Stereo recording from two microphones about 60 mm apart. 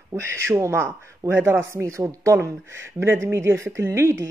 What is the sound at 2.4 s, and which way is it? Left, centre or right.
Speech, right.